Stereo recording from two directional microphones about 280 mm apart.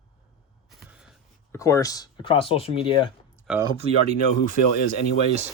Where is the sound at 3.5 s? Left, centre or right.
Centre.